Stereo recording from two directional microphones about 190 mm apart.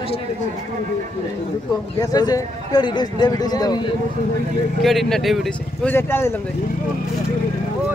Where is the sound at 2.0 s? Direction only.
20° left (ahead or behind).